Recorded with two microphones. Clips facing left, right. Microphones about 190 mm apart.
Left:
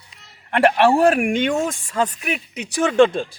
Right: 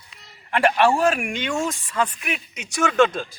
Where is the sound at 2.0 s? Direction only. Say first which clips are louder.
Left 3 dB; 40° left (ahead or behind).